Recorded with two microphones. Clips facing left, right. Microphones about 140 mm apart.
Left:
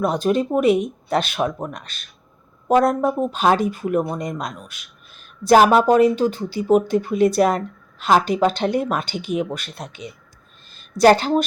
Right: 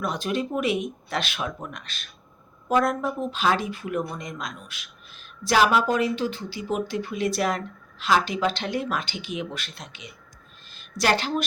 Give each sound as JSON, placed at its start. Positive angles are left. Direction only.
{"t": 0.0, "sound": "speech", "side_deg": 40}